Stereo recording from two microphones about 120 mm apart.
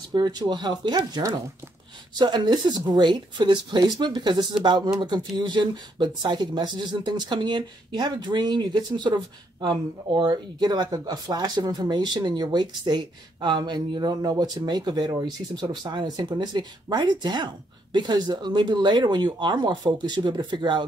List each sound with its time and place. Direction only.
0.1 s speech: 35° right (ahead or behind)